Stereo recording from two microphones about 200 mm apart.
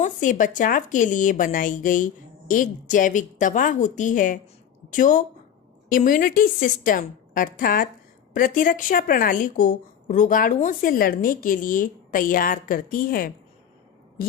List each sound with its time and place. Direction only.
0.0 s a woman's voice: 40° left (ahead or behind)